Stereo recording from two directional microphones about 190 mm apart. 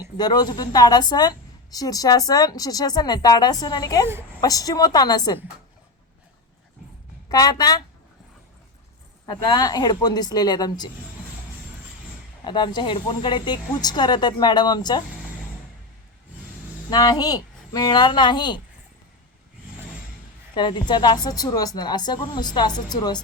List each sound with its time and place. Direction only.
0.2 s a woman's voice: 20° left (ahead or behind)
7.3 s a woman's voice: 20° left (ahead or behind)
9.2 s a woman's voice: 20° left (ahead or behind)
12.5 s a woman's voice: 25° left (ahead or behind)
16.9 s a woman's voice: 20° left (ahead or behind)
20.6 s a woman's voice: 25° left (ahead or behind)